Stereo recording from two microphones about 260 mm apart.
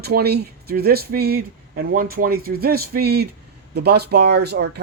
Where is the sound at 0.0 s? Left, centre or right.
Right.